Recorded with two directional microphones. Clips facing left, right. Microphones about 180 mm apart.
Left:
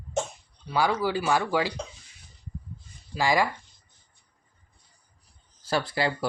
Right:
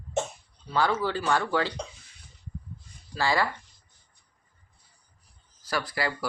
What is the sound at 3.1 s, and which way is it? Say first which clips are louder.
Speech: left 2 dB; 15° left (ahead or behind).